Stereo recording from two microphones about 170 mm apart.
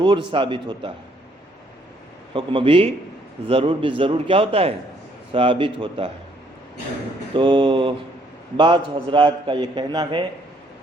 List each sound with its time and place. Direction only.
0.0 s a man's voice: 30° right (ahead or behind)
2.3 s a man's voice: 30° right (ahead or behind)
7.3 s a man's voice: 30° right (ahead or behind)